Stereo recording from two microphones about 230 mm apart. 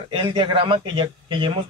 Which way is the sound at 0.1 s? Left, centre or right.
Right.